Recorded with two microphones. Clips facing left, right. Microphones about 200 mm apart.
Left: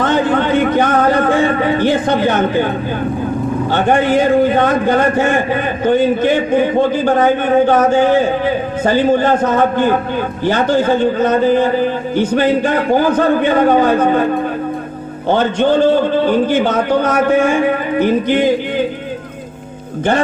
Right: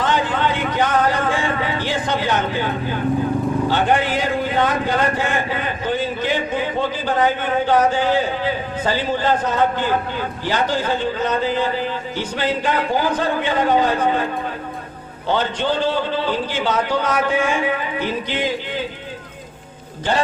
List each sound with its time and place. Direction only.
0.0 s a sound: 50° left (ahead or behind)
3.7 s a man's voice: 50° left (ahead or behind)
15.3 s a man's voice: 50° left (ahead or behind)